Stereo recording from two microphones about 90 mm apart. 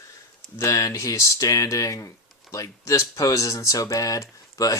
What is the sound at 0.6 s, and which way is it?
Speech, 35° left (ahead or behind).